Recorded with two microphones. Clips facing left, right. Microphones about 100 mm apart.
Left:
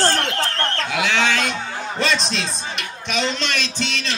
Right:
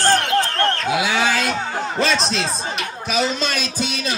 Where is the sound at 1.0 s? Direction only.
10° right (ahead or behind).